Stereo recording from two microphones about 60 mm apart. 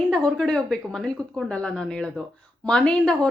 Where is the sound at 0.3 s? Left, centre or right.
Centre.